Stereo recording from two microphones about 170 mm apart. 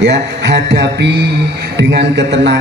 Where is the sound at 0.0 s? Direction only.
90° right.